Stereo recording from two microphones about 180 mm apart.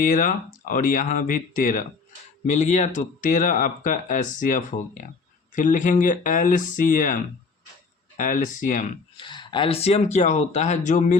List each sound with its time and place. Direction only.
0.0 s speech: 45° left (ahead or behind)
9.1 s speech: 25° left (ahead or behind); by 11.2 s 40° left (ahead or behind)